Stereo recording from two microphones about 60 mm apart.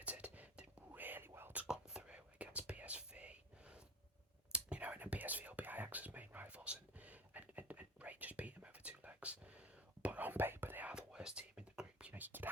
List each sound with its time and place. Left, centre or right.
0.0 s whispering: right
1.6 s whispering: centre; by 10.8 s right
10.9 s whispering: centre
12.1 s whispering: right